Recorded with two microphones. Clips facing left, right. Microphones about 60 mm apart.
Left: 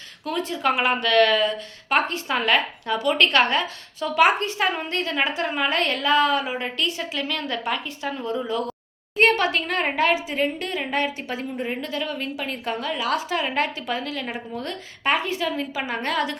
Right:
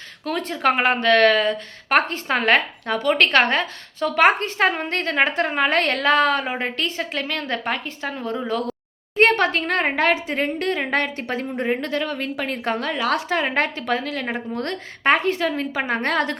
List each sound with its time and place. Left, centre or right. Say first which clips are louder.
0.3 s a woman's voice: right 2 dB; right
14.5 s a woman's voice: right 4 dB; right